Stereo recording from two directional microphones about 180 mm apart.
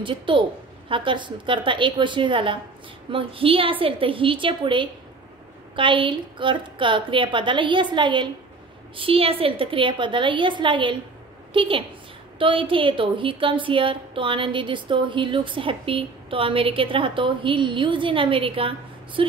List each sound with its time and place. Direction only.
0.0 s a woman's voice: 25° right (ahead or behind)